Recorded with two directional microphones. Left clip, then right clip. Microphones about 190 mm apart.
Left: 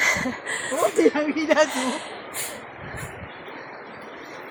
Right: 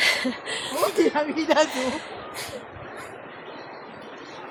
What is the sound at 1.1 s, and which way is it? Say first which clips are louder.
Speech: left 1 dB; 20° right (ahead or behind).